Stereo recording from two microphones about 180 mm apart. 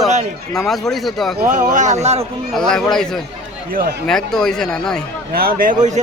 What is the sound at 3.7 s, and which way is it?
Speech, 55° right (ahead or behind).